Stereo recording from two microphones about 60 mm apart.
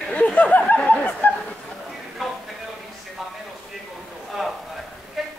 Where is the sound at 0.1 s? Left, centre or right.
Left.